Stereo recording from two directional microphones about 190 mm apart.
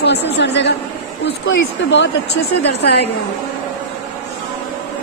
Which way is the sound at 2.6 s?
60° left (ahead or behind).